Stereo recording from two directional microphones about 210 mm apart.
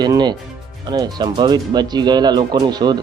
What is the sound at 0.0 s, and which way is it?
Speech, 20° right (ahead or behind).